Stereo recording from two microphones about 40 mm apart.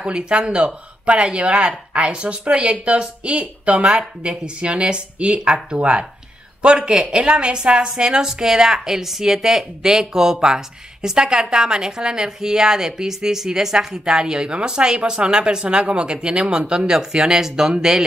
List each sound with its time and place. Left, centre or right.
0.0 s speech: right